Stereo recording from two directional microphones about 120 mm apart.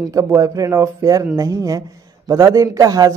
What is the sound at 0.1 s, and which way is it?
A woman's voice, 30° right (ahead or behind).